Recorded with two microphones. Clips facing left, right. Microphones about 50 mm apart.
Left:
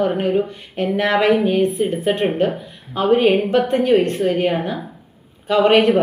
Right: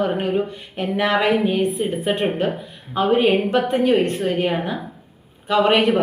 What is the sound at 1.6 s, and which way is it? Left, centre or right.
A woman's voice, right.